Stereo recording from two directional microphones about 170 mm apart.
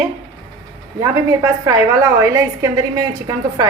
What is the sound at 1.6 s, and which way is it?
A woman's voice, 20° right (ahead or behind).